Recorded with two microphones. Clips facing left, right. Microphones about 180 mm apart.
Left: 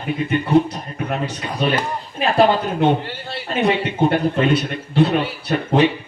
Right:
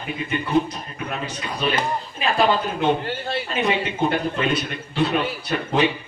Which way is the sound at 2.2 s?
55° left (ahead or behind).